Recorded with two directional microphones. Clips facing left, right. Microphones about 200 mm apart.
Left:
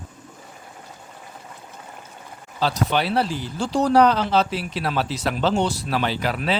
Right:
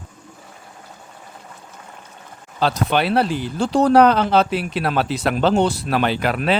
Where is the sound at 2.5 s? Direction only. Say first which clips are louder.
Right 3 dB; 60° right (ahead or behind).